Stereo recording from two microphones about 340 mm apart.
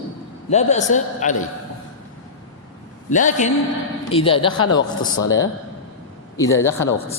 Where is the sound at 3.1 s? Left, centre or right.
Left.